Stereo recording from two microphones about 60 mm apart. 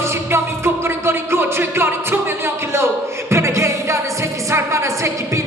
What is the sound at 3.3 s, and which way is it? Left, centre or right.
Music, right.